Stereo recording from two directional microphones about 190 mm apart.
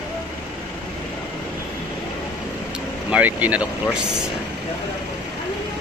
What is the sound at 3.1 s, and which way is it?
Speech, 10° right (ahead or behind).